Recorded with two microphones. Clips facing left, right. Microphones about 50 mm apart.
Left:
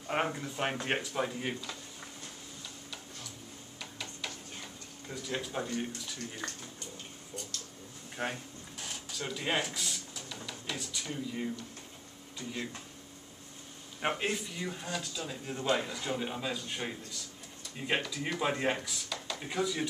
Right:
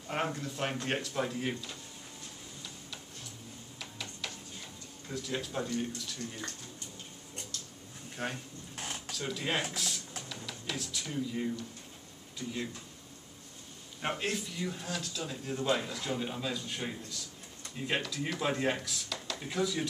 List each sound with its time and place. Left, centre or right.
0.1 s speech: centre
3.8 s a sound: centre
5.0 s speech: centre
8.2 s speech: centre
8.7 s drawer open or close: right
9.1 s speech: centre
14.0 s speech: centre